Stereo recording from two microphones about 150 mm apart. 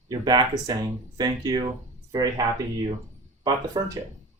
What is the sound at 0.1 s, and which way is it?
Speech, 25° right (ahead or behind).